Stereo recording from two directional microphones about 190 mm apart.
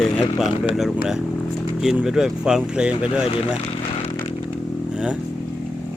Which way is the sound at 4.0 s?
30° left (ahead or behind).